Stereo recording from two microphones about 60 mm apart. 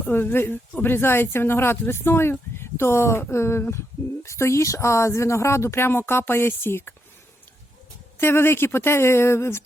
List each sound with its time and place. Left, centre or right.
0.0 s speech: left
8.2 s speech: left